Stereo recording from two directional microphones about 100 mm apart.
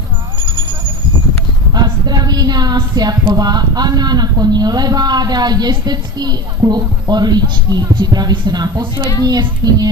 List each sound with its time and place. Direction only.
1.7 s a woman's voice: 45° right (ahead or behind)